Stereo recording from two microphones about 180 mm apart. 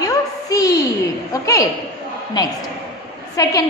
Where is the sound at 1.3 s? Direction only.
20° left (ahead or behind).